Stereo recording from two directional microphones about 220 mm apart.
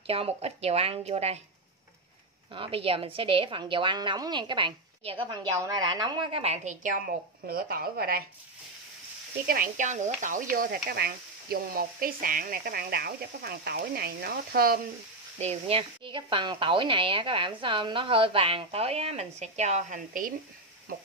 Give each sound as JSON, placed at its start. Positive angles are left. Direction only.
{"t": 0.0, "sound": "speech", "side_deg": -25}
{"t": 2.5, "sound": "speech", "side_deg": -25}
{"t": 9.5, "sound": "speech", "side_deg": -35}
{"t": 15.3, "sound": "speech", "side_deg": -30}